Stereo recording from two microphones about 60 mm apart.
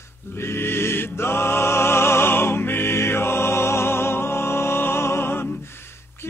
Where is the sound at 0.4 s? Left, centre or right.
Left.